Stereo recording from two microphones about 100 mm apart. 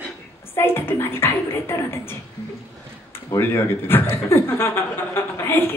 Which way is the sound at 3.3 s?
25° left (ahead or behind).